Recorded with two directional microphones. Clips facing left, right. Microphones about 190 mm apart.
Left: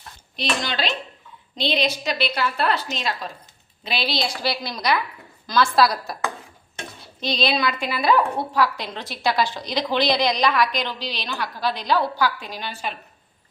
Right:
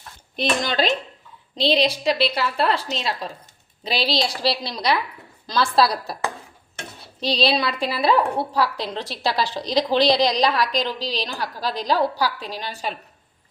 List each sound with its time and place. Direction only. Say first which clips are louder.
0.3 s speech: right 4 dB; 45° right (ahead or behind)
1.5 s a woman's voice: right 4 dB; 30° right (ahead or behind)